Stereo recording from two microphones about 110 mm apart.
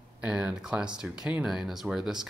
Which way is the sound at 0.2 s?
10° right (ahead or behind).